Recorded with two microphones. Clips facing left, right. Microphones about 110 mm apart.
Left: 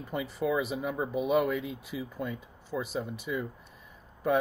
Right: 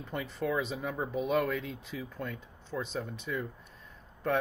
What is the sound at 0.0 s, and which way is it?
Speech, 5° left (ahead or behind).